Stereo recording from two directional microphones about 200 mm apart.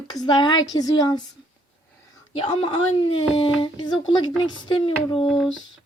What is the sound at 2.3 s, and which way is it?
A woman's voice, 25° left (ahead or behind).